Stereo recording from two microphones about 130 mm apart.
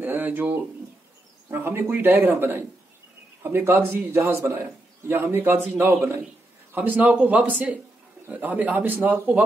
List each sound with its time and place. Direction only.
0.0 s bird: 15° right (ahead or behind)
1.5 s a man's voice: 15° right (ahead or behind)